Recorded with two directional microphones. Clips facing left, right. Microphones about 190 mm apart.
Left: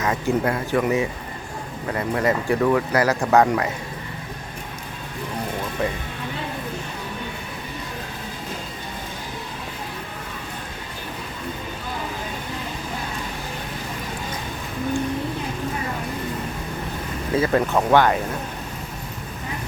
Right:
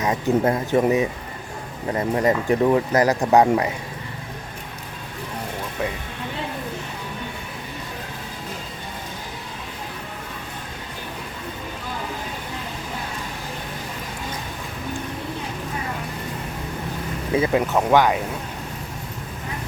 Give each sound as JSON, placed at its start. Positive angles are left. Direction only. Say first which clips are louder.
{"t": 0.0, "sound": "speech", "louder": "right 2 dB", "side_deg": -20}
{"t": 17.3, "sound": "speech", "louder": "even", "side_deg": -20}